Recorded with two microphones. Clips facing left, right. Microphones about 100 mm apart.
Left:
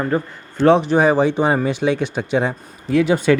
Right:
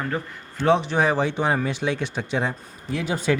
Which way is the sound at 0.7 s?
50° left (ahead or behind).